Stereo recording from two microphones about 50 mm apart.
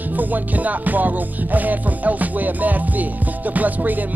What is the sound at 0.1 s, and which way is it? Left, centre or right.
Music, right.